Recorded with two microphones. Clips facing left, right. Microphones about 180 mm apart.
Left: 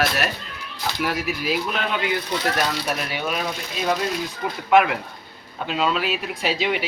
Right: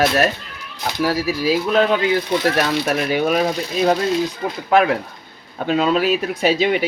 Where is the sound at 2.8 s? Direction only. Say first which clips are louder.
Right 8 dB; 45° right (ahead or behind).